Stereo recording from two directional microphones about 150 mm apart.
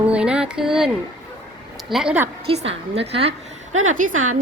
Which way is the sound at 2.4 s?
40° right (ahead or behind).